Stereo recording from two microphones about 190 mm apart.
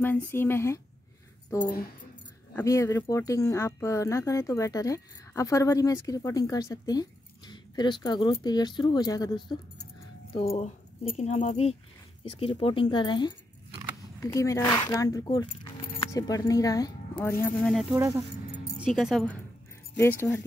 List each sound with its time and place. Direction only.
0.0 s speech: 10° left (ahead or behind)
10.3 s speech: 30° left (ahead or behind); by 17.7 s 10° left (ahead or behind)
18.6 s speech: 5° right (ahead or behind)
20.0 s speech: 15° left (ahead or behind)